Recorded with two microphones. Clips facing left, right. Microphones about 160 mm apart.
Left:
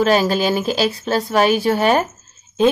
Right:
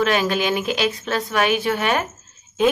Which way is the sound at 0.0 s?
35° left (ahead or behind).